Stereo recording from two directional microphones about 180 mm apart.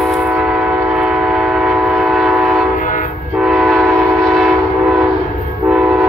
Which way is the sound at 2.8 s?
45° left (ahead or behind).